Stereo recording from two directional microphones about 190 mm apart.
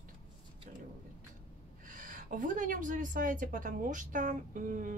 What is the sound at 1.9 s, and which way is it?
A woman's voice, 40° right (ahead or behind).